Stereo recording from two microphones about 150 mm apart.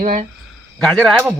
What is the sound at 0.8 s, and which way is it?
Speech, 5° left (ahead or behind).